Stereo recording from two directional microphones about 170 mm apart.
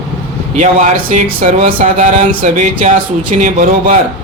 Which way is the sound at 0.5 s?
45° right (ahead or behind).